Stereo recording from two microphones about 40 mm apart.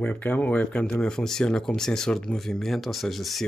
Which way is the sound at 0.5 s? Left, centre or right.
Left.